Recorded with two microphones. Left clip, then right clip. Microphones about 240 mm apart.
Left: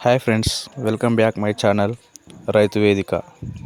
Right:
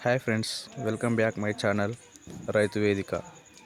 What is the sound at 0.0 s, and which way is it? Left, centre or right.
Speech, left.